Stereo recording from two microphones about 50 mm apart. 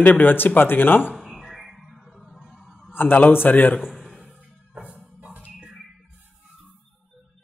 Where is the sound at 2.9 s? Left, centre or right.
Left.